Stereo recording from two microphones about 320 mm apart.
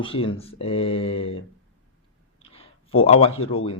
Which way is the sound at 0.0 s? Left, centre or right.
Centre.